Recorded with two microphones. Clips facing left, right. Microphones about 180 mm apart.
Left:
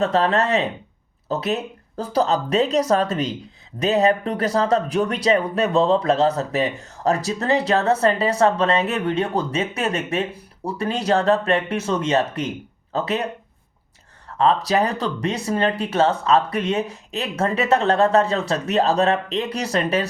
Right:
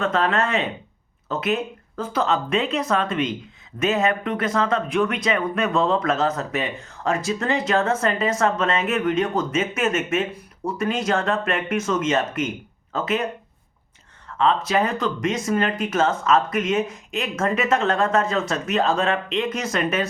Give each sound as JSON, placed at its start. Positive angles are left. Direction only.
{"t": 0.0, "sound": "speech", "side_deg": 35}
{"t": 14.3, "sound": "speech", "side_deg": 40}